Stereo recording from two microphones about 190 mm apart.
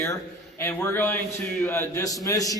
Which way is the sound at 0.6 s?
10° left (ahead or behind).